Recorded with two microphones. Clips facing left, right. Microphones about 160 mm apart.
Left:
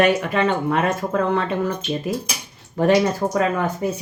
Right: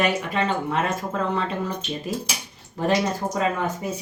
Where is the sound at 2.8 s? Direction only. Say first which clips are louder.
Left 6 dB; 65° left (ahead or behind).